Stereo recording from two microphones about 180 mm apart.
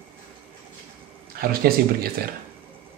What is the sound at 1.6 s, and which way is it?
Speech, 60° right (ahead or behind).